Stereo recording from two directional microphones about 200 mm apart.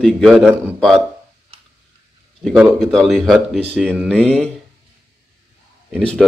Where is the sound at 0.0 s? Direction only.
Centre (ahead or behind).